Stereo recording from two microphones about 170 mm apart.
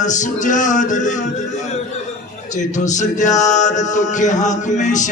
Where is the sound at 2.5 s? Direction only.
45° left (ahead or behind).